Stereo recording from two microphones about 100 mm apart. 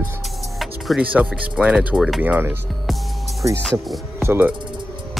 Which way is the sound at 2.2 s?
20° right (ahead or behind).